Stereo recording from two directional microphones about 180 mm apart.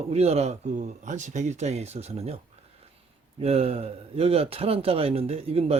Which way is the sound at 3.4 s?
35° right (ahead or behind).